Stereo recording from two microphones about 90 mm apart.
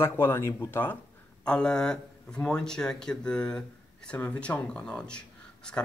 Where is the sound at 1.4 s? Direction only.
10° left (ahead or behind).